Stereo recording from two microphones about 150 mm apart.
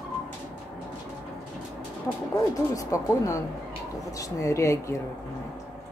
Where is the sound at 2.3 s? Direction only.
25° left (ahead or behind).